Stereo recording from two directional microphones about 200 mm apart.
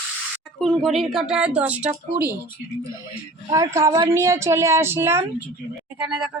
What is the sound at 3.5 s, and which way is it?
Speech, 15° right (ahead or behind).